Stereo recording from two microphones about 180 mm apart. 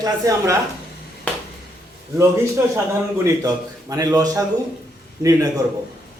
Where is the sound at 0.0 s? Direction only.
20° right (ahead or behind).